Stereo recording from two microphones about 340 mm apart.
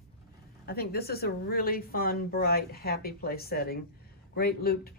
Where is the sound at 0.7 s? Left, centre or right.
Left.